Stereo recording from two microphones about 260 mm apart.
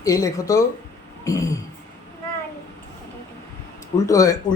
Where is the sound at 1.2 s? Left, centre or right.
Centre.